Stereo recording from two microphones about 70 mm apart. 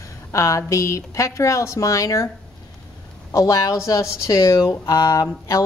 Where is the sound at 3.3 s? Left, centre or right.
Left.